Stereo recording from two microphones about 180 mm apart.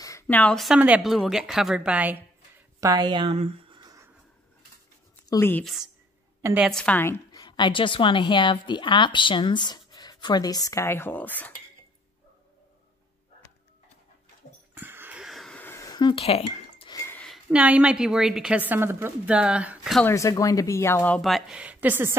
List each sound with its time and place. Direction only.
0.0 s a woman's voice: 15° left (ahead or behind); by 2.1 s 5° right (ahead or behind)
2.8 s speech: 20° right (ahead or behind)
5.3 s speech: 15° left (ahead or behind)
5.6 s a woman's voice: centre (ahead or behind)
6.7 s a woman's voice: 5° left (ahead or behind)
7.4 s a woman's voice: 25° left (ahead or behind); by 11.5 s 10° left (ahead or behind)
14.7 s a sound: 10° right (ahead or behind); by 16.9 s 30° left (ahead or behind)
16.9 s a sound: 15° left (ahead or behind)
17.2 s a woman's voice: centre (ahead or behind)
20.1 s speech: 15° left (ahead or behind); by 22.1 s 10° right (ahead or behind)